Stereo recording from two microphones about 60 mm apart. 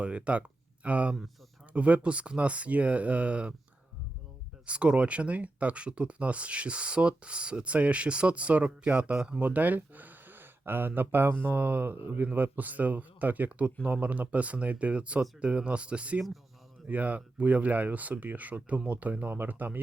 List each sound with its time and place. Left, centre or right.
0.0 s speech: right
4.6 s speech: centre
9.1 s speech: centre
9.4 s speech: right